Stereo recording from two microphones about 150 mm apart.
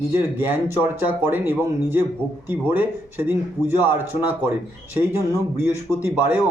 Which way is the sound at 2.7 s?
10° right (ahead or behind).